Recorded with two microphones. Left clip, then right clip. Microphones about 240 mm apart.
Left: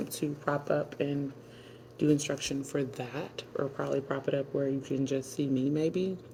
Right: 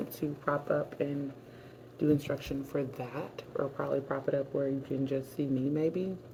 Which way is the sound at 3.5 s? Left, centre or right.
Left.